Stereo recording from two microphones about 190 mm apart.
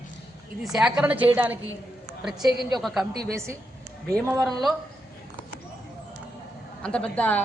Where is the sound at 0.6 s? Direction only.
5° right (ahead or behind).